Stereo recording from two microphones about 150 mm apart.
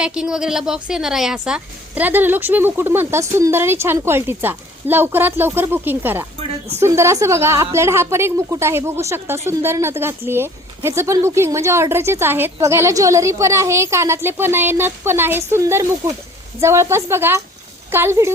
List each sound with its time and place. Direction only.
0.0 s a woman's voice: 5° right (ahead or behind)